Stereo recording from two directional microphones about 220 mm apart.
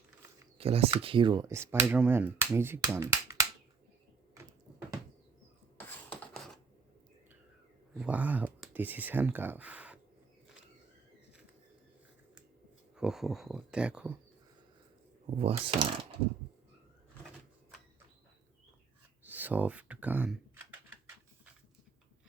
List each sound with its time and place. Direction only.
0.6 s speech: 25° right (ahead or behind)
5.7 s a sound: 5° left (ahead or behind)
7.9 s speech: 5° right (ahead or behind)
13.0 s speech: centre (ahead or behind)
15.4 s speech: 25° right (ahead or behind)
19.2 s a sound: 10° right (ahead or behind)